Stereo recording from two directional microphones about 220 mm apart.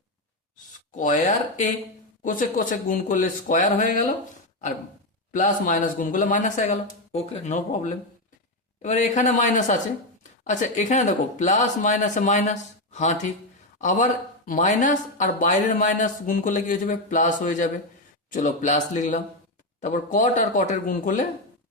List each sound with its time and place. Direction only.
0.9 s speech: 35° left (ahead or behind)
5.3 s speech: 35° left (ahead or behind)